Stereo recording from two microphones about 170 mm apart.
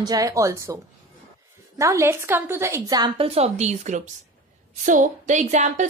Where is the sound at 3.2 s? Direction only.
35° right (ahead or behind).